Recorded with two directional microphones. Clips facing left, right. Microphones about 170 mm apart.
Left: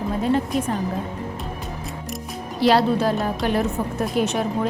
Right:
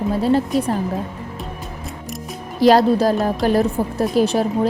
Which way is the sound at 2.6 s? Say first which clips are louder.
Right 5 dB; 40° right (ahead or behind).